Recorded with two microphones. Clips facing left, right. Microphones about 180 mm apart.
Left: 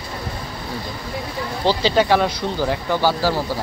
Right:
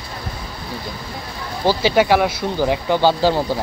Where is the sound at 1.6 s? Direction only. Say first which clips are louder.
Right 2 dB; 10° right (ahead or behind).